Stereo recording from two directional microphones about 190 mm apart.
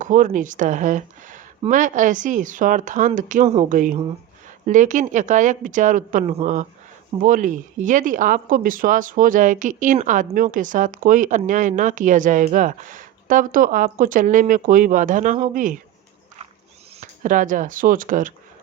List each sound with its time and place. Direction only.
0.0 s speech: 40° right (ahead or behind)
17.2 s speech: 45° right (ahead or behind)